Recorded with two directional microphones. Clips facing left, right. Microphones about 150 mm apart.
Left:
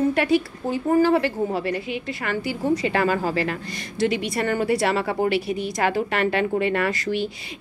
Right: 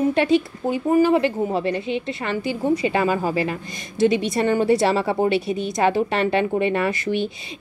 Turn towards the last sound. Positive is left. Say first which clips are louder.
# right 2 dB
turn(degrees=-20)  # may be behind; listen again after turning